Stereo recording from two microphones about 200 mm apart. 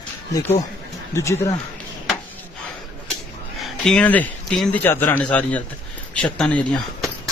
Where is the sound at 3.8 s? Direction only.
5° left (ahead or behind).